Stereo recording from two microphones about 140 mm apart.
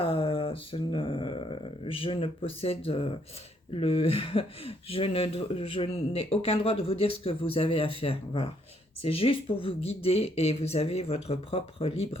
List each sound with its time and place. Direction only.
0.0 s mantra: 40° left (ahead or behind)
3.8 s speech: 45° left (ahead or behind)